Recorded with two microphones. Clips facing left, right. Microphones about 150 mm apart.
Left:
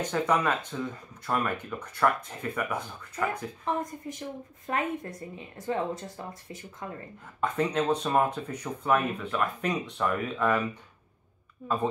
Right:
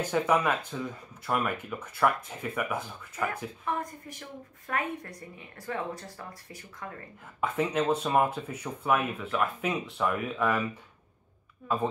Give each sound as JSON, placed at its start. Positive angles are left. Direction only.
{"t": 0.0, "sound": "speech", "side_deg": -5}
{"t": 3.8, "sound": "speech", "side_deg": 20}
{"t": 7.3, "sound": "speech", "side_deg": -5}